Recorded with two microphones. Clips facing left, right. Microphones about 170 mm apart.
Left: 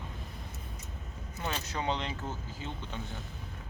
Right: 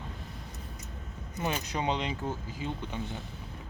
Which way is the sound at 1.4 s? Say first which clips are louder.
Right 4 dB; 15° right (ahead or behind).